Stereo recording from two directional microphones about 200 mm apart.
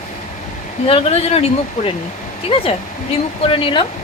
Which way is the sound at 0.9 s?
30° left (ahead or behind).